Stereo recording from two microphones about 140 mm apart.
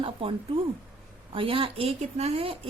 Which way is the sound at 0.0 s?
40° right (ahead or behind).